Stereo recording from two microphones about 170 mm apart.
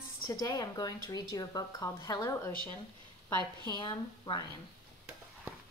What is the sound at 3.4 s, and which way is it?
Speech, 25° right (ahead or behind).